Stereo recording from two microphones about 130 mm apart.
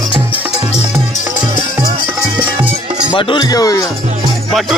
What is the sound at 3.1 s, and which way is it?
Speech, 40° left (ahead or behind).